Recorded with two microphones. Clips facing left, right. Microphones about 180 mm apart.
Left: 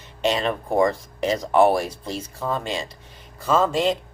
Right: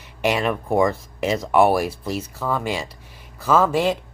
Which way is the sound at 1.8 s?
5° right (ahead or behind).